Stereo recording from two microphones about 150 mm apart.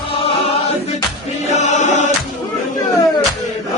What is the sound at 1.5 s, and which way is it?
Chant, 50° left (ahead or behind).